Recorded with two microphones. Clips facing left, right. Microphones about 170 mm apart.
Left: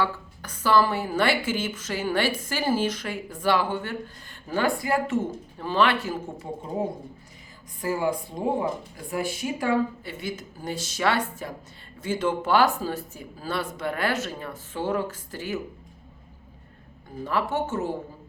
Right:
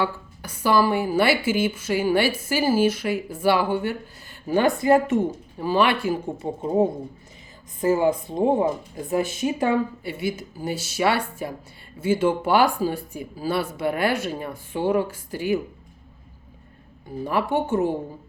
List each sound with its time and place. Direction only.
0.0 s a woman's voice: 10° right (ahead or behind)
7.8 s speech: 20° right (ahead or behind)
10.0 s a woman's voice: 10° right (ahead or behind)
17.2 s a woman's voice: 15° right (ahead or behind)